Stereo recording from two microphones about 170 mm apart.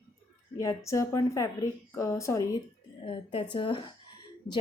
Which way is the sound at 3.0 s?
30° left (ahead or behind).